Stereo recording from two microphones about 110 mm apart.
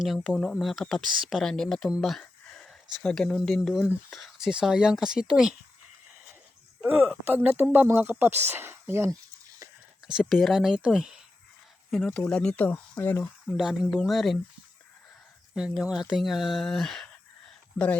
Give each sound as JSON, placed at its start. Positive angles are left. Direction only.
{"t": 0.0, "sound": "speech", "side_deg": 0}
{"t": 6.8, "sound": "speech", "side_deg": -10}
{"t": 10.1, "sound": "speech", "side_deg": -5}
{"t": 13.5, "sound": "speech", "side_deg": -5}
{"t": 15.5, "sound": "speech", "side_deg": -5}